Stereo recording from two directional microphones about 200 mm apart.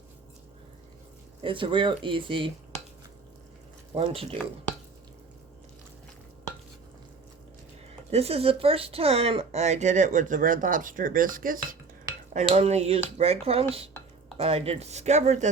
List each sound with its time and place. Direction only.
1.4 s speech: 25° right (ahead or behind)
3.9 s speech: 30° right (ahead or behind)
8.1 s speech: 30° right (ahead or behind)